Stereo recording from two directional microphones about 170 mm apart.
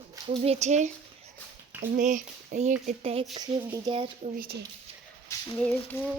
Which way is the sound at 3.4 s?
25° right (ahead or behind).